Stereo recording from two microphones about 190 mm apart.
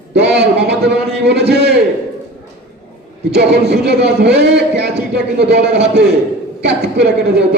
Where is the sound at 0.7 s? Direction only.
60° right (ahead or behind).